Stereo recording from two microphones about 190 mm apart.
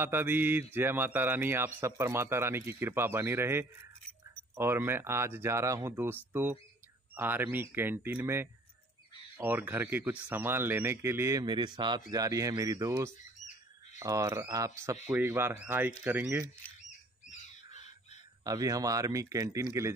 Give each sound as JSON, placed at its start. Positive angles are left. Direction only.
{"t": 0.0, "sound": "speech", "side_deg": -10}
{"t": 18.4, "sound": "speech", "side_deg": -20}